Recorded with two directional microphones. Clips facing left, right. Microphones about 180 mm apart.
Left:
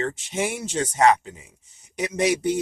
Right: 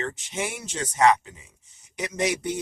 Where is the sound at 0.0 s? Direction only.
25° left (ahead or behind).